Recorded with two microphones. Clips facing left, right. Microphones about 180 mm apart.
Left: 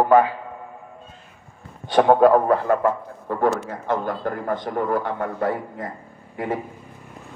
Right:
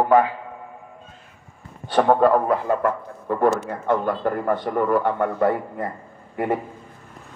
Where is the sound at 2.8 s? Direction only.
55° right (ahead or behind).